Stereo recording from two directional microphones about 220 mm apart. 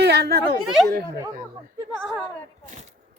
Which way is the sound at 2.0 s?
Centre (ahead or behind).